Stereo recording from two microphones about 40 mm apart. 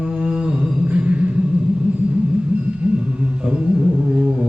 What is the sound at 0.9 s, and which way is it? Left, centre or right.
Music, right.